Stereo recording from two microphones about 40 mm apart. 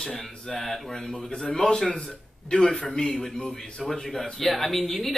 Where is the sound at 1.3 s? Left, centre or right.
Left.